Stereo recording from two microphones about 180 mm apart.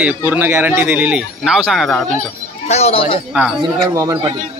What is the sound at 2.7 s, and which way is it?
Speech, 35° left (ahead or behind).